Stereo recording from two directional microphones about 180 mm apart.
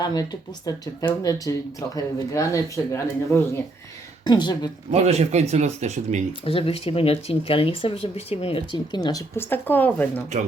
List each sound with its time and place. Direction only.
0.0 s speech: 25° left (ahead or behind)
4.9 s speech: 35° right (ahead or behind)
6.4 s speech: 30° left (ahead or behind); by 10.2 s 10° left (ahead or behind)